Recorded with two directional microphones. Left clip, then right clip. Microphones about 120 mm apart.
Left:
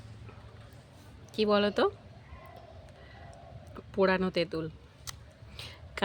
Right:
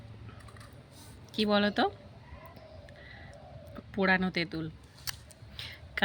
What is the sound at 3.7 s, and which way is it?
Speech, 30° left (ahead or behind).